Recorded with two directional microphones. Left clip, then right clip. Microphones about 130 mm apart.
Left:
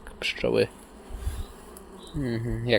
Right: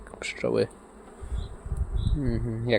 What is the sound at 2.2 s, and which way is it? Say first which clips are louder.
Speech: left 1 dB; 35° right (ahead or behind).